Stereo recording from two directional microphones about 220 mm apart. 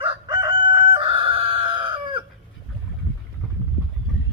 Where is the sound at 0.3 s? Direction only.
20° right (ahead or behind).